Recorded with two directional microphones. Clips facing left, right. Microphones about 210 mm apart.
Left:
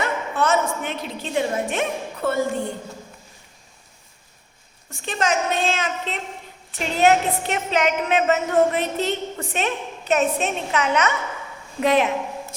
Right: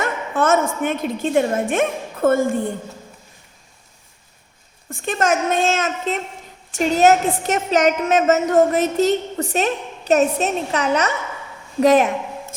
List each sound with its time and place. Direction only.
0.0 s a sound: 50° right (ahead or behind)
0.8 s a woman's voice: 50° right (ahead or behind)
4.9 s a woman's voice: 50° right (ahead or behind)